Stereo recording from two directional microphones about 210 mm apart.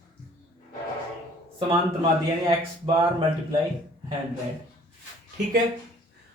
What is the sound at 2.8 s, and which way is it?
Speech, 25° right (ahead or behind).